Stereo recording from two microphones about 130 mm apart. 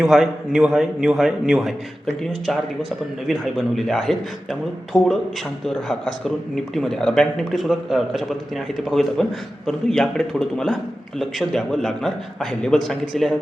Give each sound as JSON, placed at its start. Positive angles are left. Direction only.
{"t": 0.0, "sound": "a man's voice", "side_deg": -5}